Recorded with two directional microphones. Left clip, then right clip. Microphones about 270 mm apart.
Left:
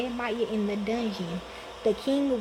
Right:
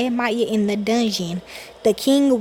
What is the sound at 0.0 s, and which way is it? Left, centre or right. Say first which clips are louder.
Speech: right 9 dB; right.